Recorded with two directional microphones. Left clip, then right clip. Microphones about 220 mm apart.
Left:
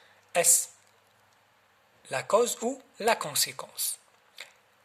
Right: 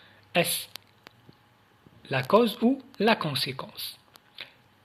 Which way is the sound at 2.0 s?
15° left (ahead or behind).